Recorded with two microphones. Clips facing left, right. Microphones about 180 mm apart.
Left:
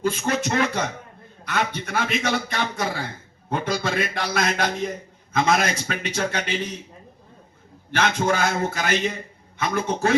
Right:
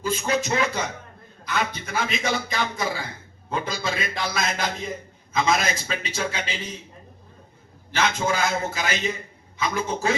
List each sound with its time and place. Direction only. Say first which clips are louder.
0.0 s a man's voice: left 1 dB; 55° left (ahead or behind)
7.9 s a man's voice: left 2 dB; 55° left (ahead or behind)